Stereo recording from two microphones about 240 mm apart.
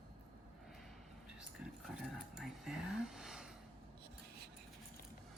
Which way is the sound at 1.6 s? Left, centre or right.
Centre.